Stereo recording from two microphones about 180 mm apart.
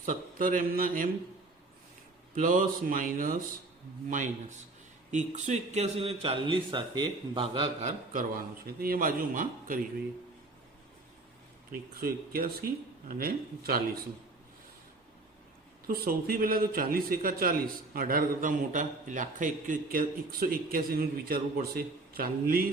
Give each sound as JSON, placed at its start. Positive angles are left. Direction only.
{"t": 0.0, "sound": "a man's voice", "side_deg": -50}
{"t": 2.3, "sound": "a man's voice", "side_deg": -45}
{"t": 7.9, "sound": "a man's voice", "side_deg": -45}
{"t": 11.9, "sound": "speech", "side_deg": -55}
{"t": 15.9, "sound": "a man's voice", "side_deg": -55}